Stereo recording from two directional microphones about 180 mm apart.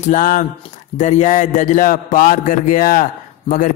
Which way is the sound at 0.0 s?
45° left (ahead or behind).